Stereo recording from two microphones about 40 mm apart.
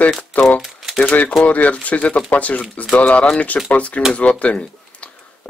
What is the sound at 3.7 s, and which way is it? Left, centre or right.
Speech, left.